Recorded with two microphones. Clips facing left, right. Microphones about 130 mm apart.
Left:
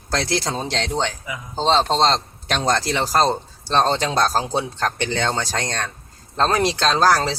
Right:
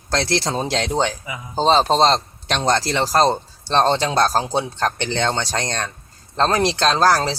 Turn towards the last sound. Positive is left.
turn(degrees=0)  # may be behind; listen again after turning